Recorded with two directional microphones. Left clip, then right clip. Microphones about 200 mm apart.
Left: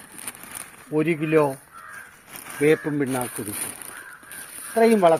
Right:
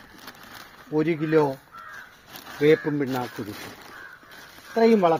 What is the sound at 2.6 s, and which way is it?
Speech, 30° left (ahead or behind).